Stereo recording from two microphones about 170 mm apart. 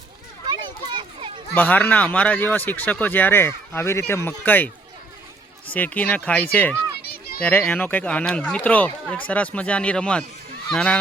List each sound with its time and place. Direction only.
1.5 s speech: 10° left (ahead or behind)
5.7 s speech: 10° left (ahead or behind)
7.0 s a sound: 65° left (ahead or behind)
7.4 s speech: 10° left (ahead or behind)